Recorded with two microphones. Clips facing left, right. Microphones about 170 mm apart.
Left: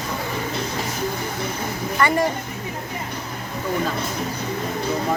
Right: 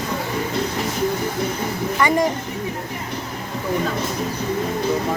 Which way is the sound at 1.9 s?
15° right (ahead or behind).